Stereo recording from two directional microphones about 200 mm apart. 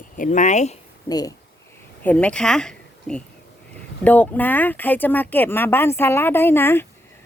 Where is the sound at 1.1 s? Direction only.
20° left (ahead or behind).